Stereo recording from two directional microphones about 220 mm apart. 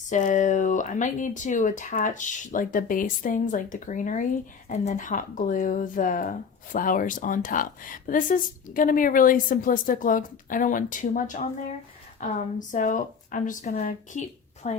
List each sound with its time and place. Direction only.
0.1 s speech: 35° left (ahead or behind)
12.5 s speech: 35° left (ahead or behind)